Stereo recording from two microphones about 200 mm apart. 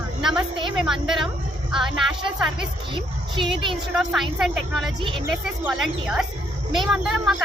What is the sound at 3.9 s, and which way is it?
Speech, centre (ahead or behind).